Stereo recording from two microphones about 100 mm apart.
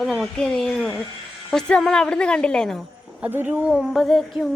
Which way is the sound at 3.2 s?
20° right (ahead or behind).